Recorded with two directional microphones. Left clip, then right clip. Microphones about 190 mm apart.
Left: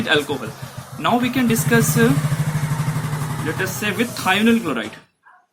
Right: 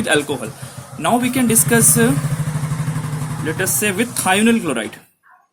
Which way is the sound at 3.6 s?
50° right (ahead or behind).